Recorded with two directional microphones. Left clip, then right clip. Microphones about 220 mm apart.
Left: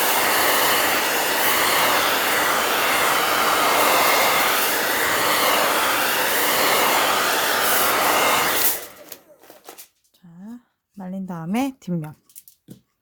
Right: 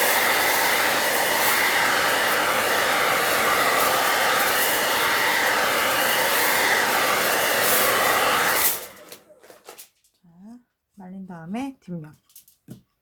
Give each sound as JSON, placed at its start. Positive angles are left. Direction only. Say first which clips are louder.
{"t": 0.0, "sound": "train", "louder": "left 1 dB", "side_deg": 10}
{"t": 1.1, "sound": "vehicle", "louder": "left 1 dB", "side_deg": 20}
{"t": 2.0, "sound": "vehicle", "louder": "left 1 dB", "side_deg": 0}
{"t": 3.6, "sound": "vehicle", "louder": "left 2 dB", "side_deg": 25}
{"t": 4.3, "sound": "hair dryer", "louder": "left 2 dB", "side_deg": 0}
{"t": 7.0, "sound": "vehicle", "louder": "left 1 dB", "side_deg": 0}
{"t": 8.0, "sound": "vehicle", "louder": "left 2 dB", "side_deg": 15}
{"t": 11.0, "sound": "a sound", "louder": "left 7 dB", "side_deg": 55}